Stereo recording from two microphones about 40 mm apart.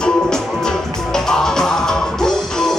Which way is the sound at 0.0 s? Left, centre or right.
Centre.